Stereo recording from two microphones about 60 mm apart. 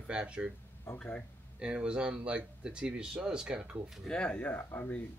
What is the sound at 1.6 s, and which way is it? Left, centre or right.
Speech, centre.